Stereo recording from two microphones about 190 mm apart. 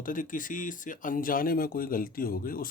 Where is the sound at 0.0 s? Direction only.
45° left (ahead or behind).